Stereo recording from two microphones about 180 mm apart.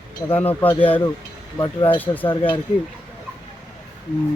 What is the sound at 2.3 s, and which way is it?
Speech, 25° left (ahead or behind).